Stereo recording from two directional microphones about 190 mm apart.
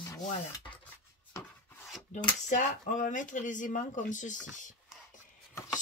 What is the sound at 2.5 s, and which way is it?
Speech, 40° left (ahead or behind).